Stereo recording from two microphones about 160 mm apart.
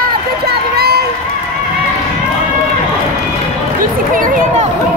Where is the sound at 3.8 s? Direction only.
60° right (ahead or behind).